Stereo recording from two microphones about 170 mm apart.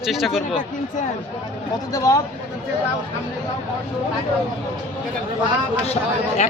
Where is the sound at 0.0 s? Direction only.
Centre (ahead or behind).